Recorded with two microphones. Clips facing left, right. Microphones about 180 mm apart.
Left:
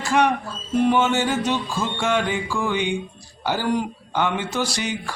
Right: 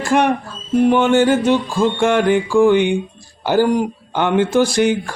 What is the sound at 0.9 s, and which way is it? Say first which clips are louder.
Mantra: right 8 dB; 55° right (ahead or behind).